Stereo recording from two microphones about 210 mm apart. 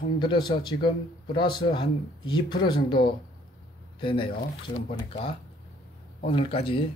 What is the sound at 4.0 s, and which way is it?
Speech, 25° left (ahead or behind).